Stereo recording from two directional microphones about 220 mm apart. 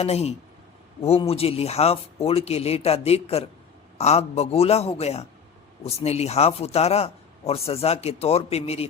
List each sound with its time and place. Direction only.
0.0 s speech: 30° left (ahead or behind)